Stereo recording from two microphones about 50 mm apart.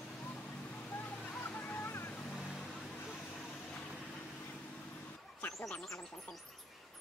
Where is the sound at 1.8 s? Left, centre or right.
Left.